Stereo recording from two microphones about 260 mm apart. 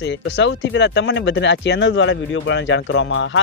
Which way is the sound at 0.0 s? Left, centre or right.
Left.